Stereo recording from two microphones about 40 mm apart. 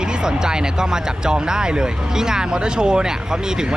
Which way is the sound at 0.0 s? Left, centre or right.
Centre.